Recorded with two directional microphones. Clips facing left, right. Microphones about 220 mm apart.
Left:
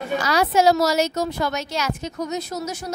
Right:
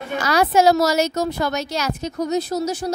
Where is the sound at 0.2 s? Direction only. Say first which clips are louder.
Right 3 dB; 50° right (ahead or behind).